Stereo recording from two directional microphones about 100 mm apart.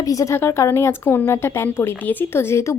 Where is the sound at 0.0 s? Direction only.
35° left (ahead or behind).